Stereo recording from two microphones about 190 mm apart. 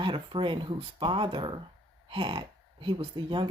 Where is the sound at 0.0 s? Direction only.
25° right (ahead or behind).